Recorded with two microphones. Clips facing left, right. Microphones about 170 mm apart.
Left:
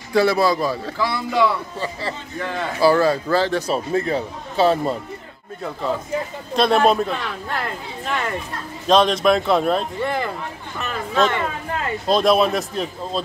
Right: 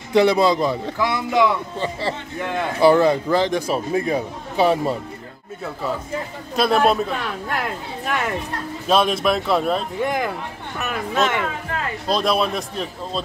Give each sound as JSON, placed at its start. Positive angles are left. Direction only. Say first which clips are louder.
{"t": 0.1, "sound": "speech", "louder": "right 2 dB", "side_deg": -20}
{"t": 6.5, "sound": "a man's voice", "louder": "left 1 dB", "side_deg": -5}
{"t": 10.0, "sound": "a man's voice", "louder": "right 1 dB", "side_deg": -10}